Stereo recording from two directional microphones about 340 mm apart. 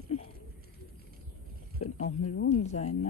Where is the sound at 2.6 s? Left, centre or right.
Centre.